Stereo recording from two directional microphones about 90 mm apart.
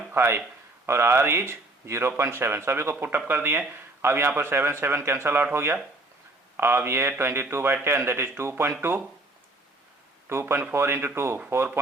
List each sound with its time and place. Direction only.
0.1 s speech: 25° right (ahead or behind)
10.4 s speech: 20° right (ahead or behind)